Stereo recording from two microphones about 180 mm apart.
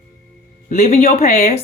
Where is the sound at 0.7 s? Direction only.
45° left (ahead or behind).